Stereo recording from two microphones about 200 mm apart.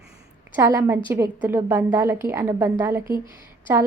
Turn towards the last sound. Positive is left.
turn(degrees=-10)  # may be behind; listen again after turning